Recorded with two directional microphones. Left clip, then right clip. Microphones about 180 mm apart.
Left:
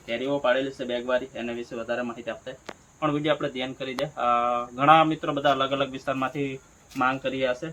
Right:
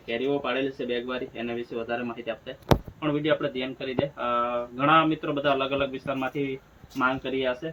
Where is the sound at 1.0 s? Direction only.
20° left (ahead or behind).